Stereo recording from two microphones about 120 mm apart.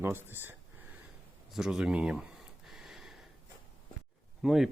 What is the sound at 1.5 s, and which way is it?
Speech, 5° right (ahead or behind).